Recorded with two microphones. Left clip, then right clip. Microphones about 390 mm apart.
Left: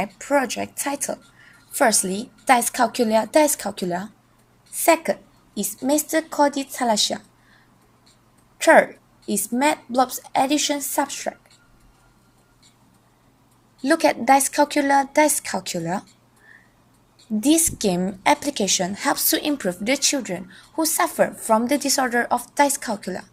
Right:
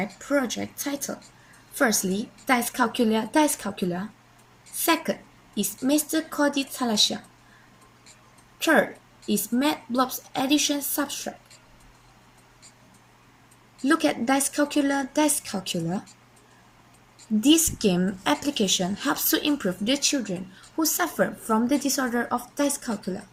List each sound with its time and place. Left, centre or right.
0.0 s a woman's voice: left
9.2 s a woman's voice: centre
13.9 s a woman's voice: centre
17.4 s a woman's voice: centre